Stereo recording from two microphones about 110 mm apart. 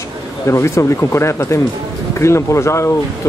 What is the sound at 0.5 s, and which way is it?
Speech, 25° left (ahead or behind).